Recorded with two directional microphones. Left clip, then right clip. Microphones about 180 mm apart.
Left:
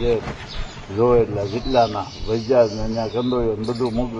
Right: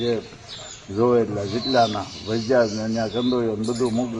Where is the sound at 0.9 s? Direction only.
15° right (ahead or behind).